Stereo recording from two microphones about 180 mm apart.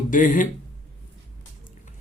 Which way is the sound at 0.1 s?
45° left (ahead or behind).